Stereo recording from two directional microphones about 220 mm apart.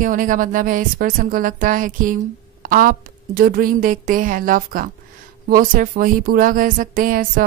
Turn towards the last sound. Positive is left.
turn(degrees=-40)  # may be behind; listen again after turning